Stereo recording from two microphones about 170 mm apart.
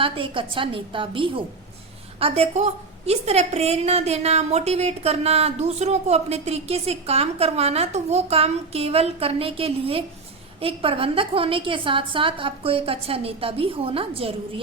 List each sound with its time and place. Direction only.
0.0 s a woman's voice: 30° right (ahead or behind)